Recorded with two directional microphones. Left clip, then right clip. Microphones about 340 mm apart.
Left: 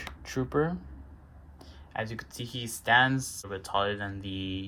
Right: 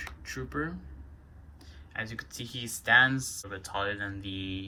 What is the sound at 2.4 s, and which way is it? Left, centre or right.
Speech, left.